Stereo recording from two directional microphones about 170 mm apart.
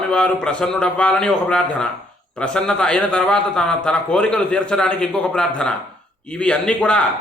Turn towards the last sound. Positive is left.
turn(degrees=5)  # may be behind; listen again after turning